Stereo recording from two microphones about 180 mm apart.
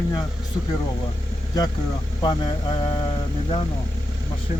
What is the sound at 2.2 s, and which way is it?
Speech, 25° left (ahead or behind).